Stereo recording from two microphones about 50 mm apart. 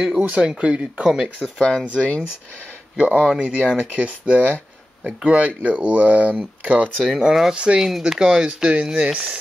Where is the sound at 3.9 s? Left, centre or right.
Right.